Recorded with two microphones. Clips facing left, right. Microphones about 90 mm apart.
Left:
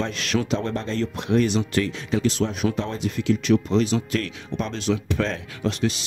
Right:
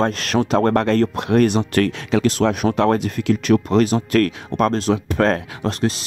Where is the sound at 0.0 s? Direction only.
45° right (ahead or behind); by 2.3 s 75° right (ahead or behind).